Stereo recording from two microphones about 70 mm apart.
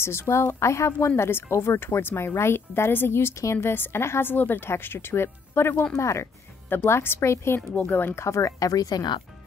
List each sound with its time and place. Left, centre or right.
0.0 s speech: left
5.9 s a woman's voice: left
8.2 s speech: left